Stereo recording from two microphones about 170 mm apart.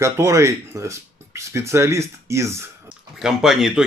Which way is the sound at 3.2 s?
Centre (ahead or behind).